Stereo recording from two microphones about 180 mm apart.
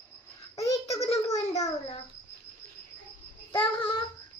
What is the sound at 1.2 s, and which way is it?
Speech, 20° left (ahead or behind).